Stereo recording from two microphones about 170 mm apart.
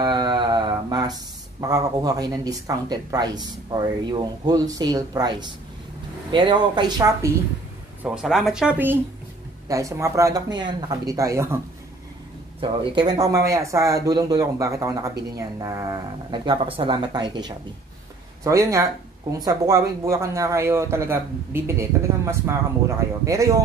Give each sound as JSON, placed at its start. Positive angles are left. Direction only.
{"t": 0.0, "sound": "mantra", "side_deg": -25}
{"t": 1.6, "sound": "speech", "side_deg": -20}
{"t": 8.0, "sound": "speech", "side_deg": -5}
{"t": 12.5, "sound": "a man's voice", "side_deg": -30}